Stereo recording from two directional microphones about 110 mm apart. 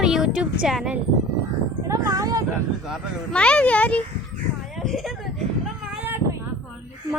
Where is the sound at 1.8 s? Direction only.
30° right (ahead or behind).